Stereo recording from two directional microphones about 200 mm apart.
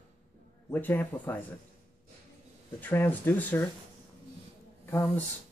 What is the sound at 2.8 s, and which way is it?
Speech, 10° left (ahead or behind).